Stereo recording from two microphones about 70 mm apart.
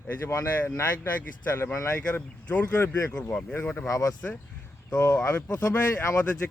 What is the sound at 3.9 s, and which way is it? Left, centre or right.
Speech, left.